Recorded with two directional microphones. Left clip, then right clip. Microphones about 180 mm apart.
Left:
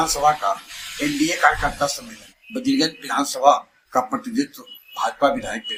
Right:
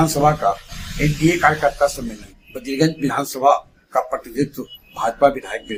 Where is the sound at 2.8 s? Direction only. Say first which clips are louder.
Right 7 dB; 45° right (ahead or behind).